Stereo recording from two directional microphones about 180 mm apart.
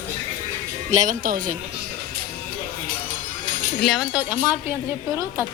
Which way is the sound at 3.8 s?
Centre (ahead or behind).